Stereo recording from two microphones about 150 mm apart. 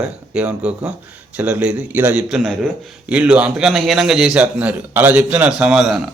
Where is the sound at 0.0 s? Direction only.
5° right (ahead or behind).